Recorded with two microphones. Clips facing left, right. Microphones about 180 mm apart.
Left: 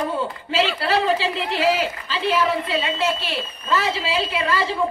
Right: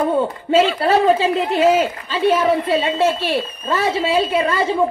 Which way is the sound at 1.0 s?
45° right (ahead or behind).